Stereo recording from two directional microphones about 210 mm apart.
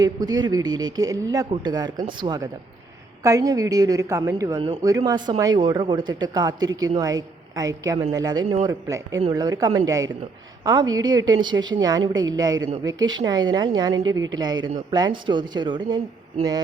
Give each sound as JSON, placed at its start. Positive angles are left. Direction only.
{"t": 0.0, "sound": "a man's voice", "side_deg": -20}